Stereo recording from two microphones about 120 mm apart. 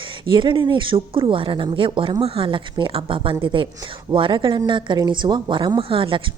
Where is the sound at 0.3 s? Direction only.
45° right (ahead or behind).